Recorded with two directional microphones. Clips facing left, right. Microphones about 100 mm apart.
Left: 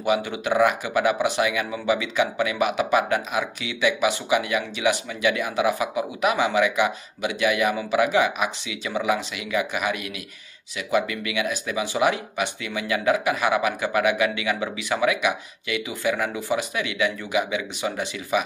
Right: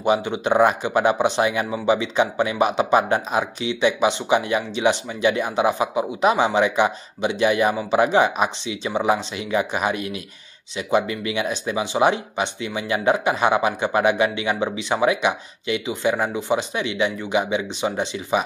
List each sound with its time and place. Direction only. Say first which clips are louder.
0.0 s speech: right 3 dB; 30° right (ahead or behind)